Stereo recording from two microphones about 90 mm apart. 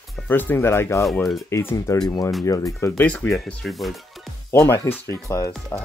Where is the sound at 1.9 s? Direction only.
50° left (ahead or behind).